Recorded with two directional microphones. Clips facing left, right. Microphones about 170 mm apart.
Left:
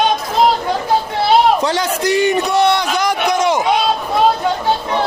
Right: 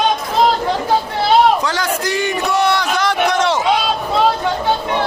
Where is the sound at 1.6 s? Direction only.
20° left (ahead or behind).